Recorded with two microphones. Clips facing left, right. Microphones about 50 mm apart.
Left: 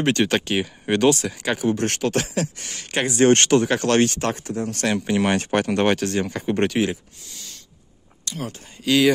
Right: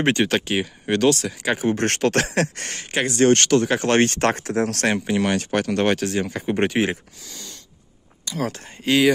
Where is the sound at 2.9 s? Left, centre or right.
Centre.